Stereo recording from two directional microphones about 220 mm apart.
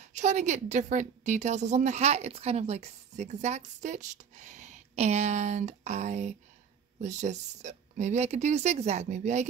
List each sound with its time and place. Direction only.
0.0 s a woman's voice: 30° right (ahead or behind)